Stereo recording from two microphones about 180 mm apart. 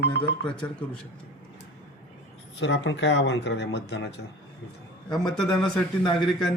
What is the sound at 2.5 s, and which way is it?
Speech, 75° left (ahead or behind).